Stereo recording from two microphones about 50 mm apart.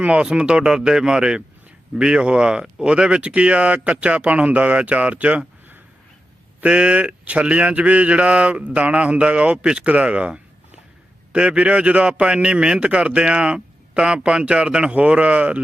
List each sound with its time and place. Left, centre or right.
0.0 s speech: right
6.6 s speech: right